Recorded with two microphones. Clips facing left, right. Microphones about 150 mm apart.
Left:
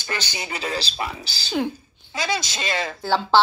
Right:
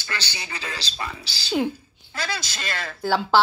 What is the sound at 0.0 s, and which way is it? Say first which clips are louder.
Speech: left 4 dB; 20° left (ahead or behind).